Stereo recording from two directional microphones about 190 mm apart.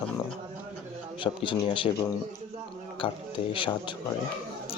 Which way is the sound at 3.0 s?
25° left (ahead or behind).